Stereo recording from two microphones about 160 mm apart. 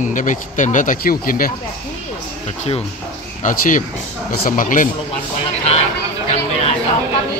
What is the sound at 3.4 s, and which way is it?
Speech, 55° left (ahead or behind).